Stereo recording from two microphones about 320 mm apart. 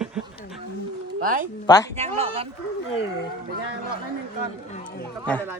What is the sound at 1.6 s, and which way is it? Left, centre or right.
Speech, centre.